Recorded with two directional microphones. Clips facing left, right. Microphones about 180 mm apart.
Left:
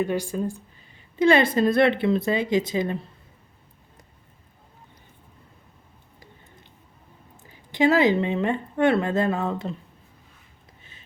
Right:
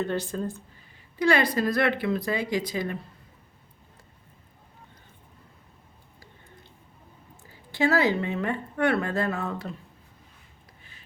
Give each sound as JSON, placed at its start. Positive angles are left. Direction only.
{"t": 0.0, "sound": "speech", "side_deg": 10}
{"t": 0.9, "sound": "speech", "side_deg": 20}
{"t": 7.7, "sound": "speech", "side_deg": 20}